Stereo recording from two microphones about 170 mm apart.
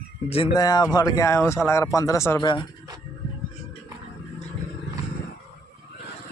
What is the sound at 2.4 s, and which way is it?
Speech, 25° left (ahead or behind).